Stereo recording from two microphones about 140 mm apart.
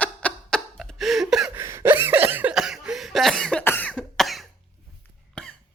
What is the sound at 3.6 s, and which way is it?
Cough, 10° left (ahead or behind).